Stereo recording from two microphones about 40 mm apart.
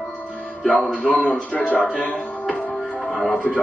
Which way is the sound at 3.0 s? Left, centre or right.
Centre.